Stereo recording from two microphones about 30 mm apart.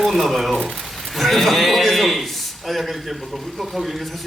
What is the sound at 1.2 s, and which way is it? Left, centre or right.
A man's voice, centre.